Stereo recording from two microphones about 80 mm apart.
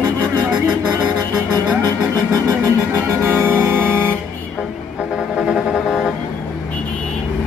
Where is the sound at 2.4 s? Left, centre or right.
Right.